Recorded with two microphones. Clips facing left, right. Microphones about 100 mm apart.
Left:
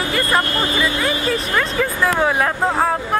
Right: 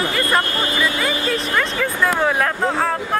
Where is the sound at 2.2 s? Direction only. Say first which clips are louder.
Left 2 dB; centre (ahead or behind).